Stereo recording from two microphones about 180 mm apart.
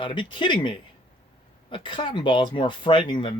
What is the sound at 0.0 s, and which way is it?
Speech, 25° left (ahead or behind).